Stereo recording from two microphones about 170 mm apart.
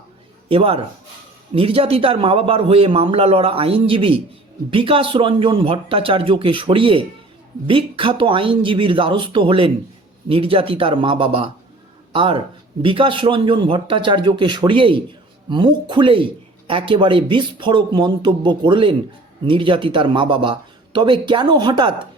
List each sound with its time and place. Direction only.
0.4 s a man's voice: 35° right (ahead or behind)